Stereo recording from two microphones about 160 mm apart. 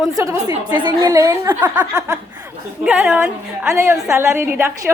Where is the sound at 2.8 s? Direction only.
10° right (ahead or behind).